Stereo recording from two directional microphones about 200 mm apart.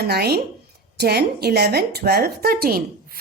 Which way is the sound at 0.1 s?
50° right (ahead or behind).